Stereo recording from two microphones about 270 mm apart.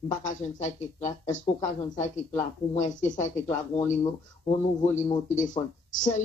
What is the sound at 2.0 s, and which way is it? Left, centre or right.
Speech, left.